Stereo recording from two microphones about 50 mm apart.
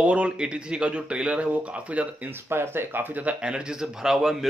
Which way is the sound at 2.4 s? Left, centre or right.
Right.